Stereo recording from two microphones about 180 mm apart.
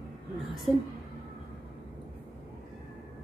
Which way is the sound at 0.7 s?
5° right (ahead or behind).